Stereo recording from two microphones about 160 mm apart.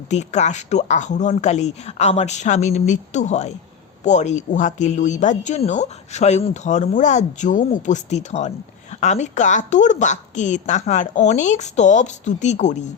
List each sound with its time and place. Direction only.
0.1 s speech: 45° left (ahead or behind)